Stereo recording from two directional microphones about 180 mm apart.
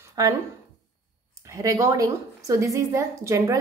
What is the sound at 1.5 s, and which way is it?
A woman's voice, 20° right (ahead or behind).